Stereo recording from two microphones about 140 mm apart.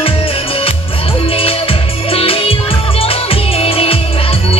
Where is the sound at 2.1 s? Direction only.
40° left (ahead or behind).